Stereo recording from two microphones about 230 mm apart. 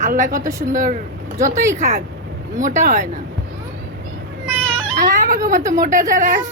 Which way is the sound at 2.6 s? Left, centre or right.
Right.